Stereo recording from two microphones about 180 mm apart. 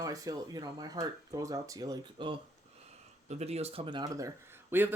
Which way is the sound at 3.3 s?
35° right (ahead or behind).